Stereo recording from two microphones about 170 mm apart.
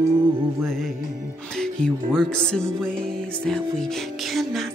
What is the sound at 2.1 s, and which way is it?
Music, 5° left (ahead or behind).